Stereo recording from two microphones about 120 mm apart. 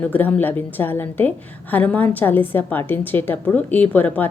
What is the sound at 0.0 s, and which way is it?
A woman's voice, 15° left (ahead or behind).